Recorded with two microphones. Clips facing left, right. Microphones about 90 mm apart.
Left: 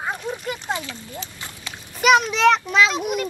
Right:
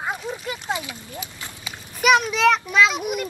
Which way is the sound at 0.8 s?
10° right (ahead or behind).